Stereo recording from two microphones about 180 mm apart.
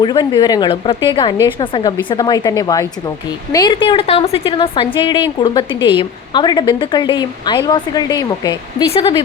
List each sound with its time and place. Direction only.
0.0 s a woman's voice: 25° left (ahead or behind)